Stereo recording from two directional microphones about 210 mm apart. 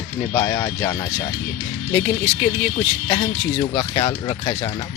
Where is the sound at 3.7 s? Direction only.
15° left (ahead or behind).